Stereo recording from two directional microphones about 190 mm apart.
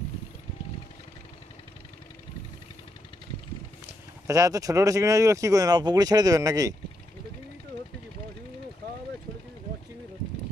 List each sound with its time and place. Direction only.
4.3 s speech: 20° right (ahead or behind)